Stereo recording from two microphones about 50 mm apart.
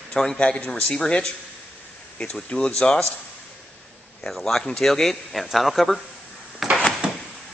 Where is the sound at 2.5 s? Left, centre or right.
Centre.